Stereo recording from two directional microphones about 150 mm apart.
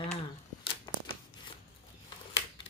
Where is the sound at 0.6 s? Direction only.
35° left (ahead or behind).